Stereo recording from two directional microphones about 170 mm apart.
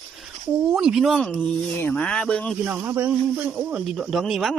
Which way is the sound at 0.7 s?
5° right (ahead or behind).